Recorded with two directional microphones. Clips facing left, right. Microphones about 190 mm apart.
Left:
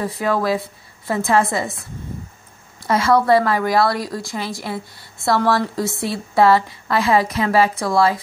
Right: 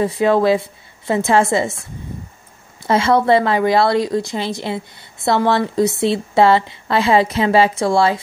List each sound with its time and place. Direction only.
0.0 s a woman's voice: 25° right (ahead or behind)